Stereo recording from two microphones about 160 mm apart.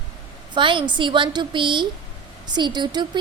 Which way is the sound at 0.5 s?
30° right (ahead or behind).